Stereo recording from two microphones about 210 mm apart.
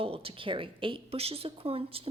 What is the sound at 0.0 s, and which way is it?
Speech, 25° right (ahead or behind).